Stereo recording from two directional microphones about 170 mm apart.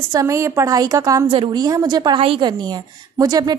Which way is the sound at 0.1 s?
20° right (ahead or behind).